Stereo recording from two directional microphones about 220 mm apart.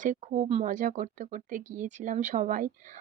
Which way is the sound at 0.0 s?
35° right (ahead or behind).